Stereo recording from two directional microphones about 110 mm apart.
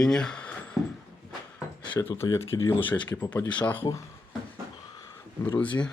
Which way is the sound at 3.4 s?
40° left (ahead or behind).